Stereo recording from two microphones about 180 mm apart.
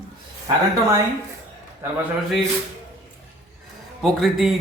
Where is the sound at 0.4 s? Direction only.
15° right (ahead or behind).